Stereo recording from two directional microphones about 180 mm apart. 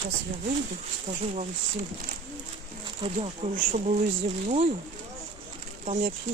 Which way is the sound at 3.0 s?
30° right (ahead or behind).